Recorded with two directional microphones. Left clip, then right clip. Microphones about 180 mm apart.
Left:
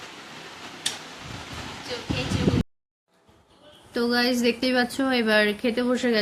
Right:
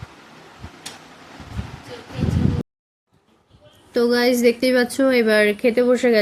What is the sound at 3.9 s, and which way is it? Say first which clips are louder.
A woman's voice: right 6 dB; 15° right (ahead or behind).